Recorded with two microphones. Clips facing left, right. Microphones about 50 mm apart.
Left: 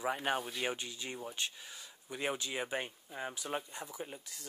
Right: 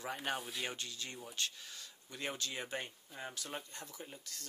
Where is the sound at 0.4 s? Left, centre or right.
Centre.